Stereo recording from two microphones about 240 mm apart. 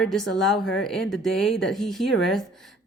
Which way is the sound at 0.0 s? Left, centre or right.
Centre.